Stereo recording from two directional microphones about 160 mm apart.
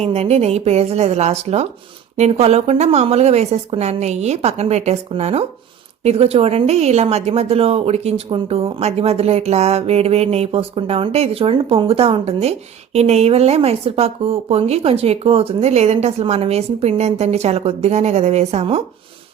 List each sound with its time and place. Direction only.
0.0 s a woman's voice: 40° right (ahead or behind)